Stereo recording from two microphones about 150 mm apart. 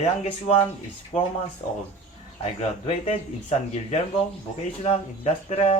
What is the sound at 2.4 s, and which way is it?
Speech, 45° left (ahead or behind).